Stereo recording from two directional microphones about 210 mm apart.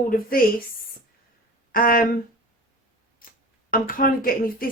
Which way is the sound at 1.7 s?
40° left (ahead or behind).